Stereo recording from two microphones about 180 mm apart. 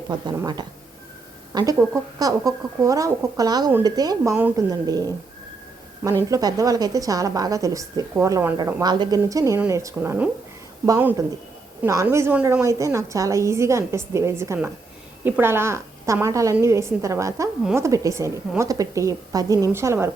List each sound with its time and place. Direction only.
0.3 s a woman's voice: 25° right (ahead or behind)
6.2 s a woman's voice: 20° right (ahead or behind)